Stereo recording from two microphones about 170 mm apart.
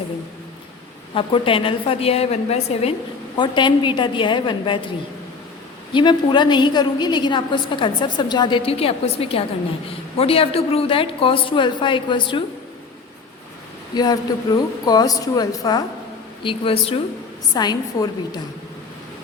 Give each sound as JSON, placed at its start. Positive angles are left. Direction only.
{"t": 1.1, "sound": "a woman's voice", "side_deg": 30}
{"t": 3.3, "sound": "a woman's voice", "side_deg": 30}
{"t": 5.9, "sound": "a woman's voice", "side_deg": 25}
{"t": 13.9, "sound": "a woman's voice", "side_deg": 25}